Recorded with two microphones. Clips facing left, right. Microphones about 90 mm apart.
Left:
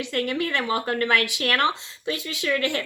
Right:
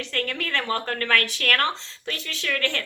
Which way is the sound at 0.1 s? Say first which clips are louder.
Left 3 dB; 15° left (ahead or behind).